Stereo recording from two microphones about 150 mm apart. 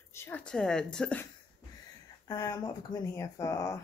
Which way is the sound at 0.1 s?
15° left (ahead or behind).